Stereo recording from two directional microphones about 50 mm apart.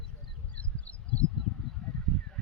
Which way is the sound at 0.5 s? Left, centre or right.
Left.